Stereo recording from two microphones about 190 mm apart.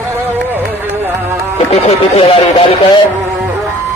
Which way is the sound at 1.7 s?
30° left (ahead or behind).